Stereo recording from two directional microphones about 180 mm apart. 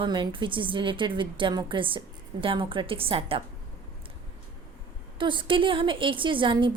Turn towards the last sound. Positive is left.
turn(degrees=-25)  # may be behind; listen again after turning